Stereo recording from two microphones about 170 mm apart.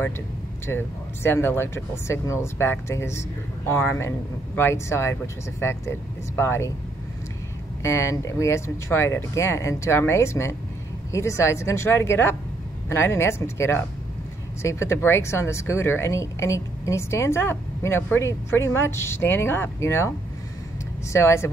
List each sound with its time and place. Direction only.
0.7 s speech: 15° left (ahead or behind)
7.8 s speech: 15° left (ahead or behind)
21.1 s speech: 15° left (ahead or behind)